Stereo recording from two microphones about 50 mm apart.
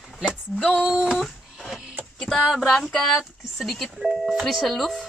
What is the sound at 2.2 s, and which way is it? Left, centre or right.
Speech, centre.